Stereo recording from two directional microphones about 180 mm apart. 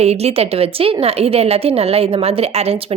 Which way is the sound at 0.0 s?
35° right (ahead or behind).